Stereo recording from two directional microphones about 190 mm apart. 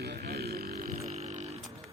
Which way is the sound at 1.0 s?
35° right (ahead or behind).